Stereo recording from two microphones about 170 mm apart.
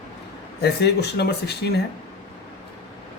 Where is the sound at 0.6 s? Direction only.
80° left.